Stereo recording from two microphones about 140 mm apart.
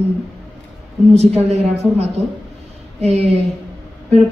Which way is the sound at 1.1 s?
50° right (ahead or behind).